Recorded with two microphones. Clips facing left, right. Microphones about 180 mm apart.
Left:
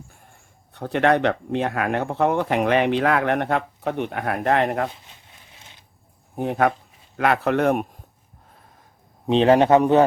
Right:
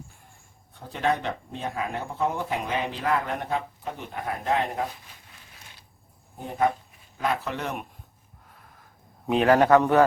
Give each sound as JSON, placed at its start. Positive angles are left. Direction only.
{"t": 0.7, "sound": "speech", "side_deg": 70}
{"t": 6.3, "sound": "speech", "side_deg": 70}
{"t": 9.3, "sound": "a man's voice", "side_deg": 25}